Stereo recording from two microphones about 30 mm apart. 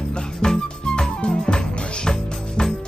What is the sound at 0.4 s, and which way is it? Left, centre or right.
Music, left.